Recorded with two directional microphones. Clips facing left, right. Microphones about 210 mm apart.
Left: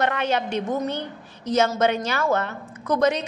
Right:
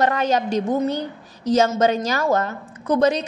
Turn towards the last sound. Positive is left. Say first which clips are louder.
# right 3 dB
turn(degrees=-30)  # may be behind; listen again after turning